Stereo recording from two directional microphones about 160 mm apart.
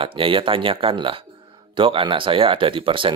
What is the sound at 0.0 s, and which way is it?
Speech, 35° right (ahead or behind).